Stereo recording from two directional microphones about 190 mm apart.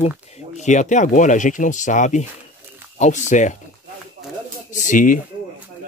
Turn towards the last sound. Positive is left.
turn(degrees=45)  # may be behind; listen again after turning